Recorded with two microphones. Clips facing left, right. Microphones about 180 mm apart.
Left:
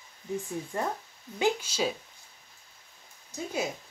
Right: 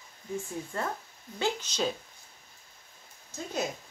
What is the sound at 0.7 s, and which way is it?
A woman's voice, 15° left (ahead or behind).